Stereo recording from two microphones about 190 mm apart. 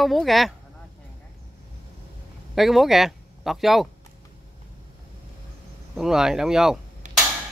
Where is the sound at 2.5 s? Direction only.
Centre (ahead or behind).